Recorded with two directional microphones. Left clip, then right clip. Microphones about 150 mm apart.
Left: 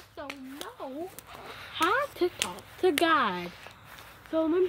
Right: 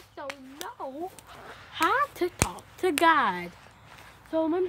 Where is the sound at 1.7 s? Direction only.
10° right (ahead or behind).